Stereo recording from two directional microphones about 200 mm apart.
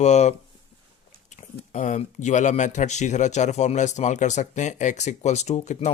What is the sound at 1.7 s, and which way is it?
Speech, 35° left (ahead or behind).